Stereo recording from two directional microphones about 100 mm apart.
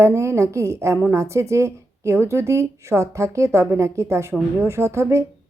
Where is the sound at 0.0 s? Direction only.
25° right (ahead or behind).